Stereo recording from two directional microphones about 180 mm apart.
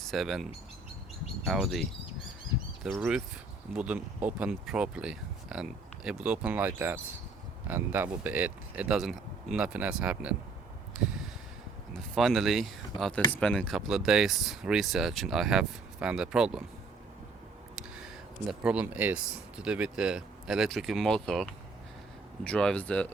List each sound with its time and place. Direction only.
0.0 s speech: centre (ahead or behind)
1.5 s speech: centre (ahead or behind)
11.9 s speech: centre (ahead or behind)
17.7 s speech: 5° right (ahead or behind)
22.4 s speech: 5° left (ahead or behind)